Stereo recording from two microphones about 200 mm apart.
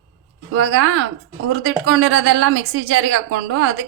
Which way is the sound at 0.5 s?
70° right (ahead or behind).